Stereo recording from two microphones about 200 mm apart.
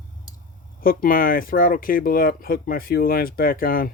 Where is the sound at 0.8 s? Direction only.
45° left (ahead or behind).